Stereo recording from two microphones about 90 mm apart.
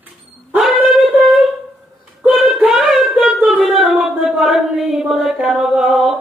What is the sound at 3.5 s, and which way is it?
Singing, 5° right (ahead or behind).